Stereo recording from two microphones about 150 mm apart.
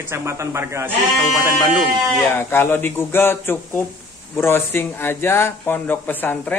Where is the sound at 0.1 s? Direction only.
20° right (ahead or behind).